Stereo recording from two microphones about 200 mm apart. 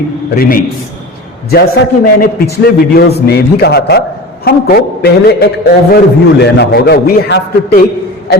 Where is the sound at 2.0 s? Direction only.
45° left (ahead or behind).